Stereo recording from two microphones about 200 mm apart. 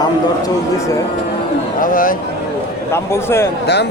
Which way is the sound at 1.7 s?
45° left (ahead or behind).